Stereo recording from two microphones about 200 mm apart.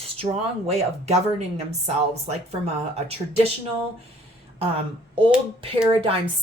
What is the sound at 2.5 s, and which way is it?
Speech, 30° right (ahead or behind).